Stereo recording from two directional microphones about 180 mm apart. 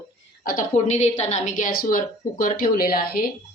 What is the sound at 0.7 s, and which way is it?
A woman's voice, 40° left (ahead or behind).